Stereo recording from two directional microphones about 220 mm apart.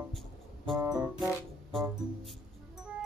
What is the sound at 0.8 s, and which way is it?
Music, 15° right (ahead or behind).